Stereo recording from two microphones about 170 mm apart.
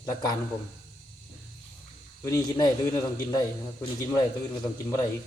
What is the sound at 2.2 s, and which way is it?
A man's voice, 20° left (ahead or behind).